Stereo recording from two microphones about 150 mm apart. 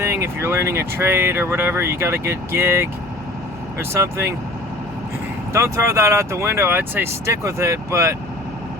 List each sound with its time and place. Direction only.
0.0 s speech: 20° right (ahead or behind)
5.5 s speech: 20° right (ahead or behind)